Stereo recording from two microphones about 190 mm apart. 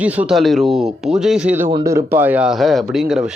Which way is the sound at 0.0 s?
10° right (ahead or behind).